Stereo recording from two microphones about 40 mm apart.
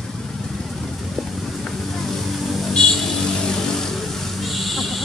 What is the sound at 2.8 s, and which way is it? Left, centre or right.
Music, centre.